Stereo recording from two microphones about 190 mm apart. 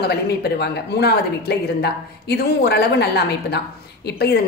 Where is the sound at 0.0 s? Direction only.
55° left (ahead or behind).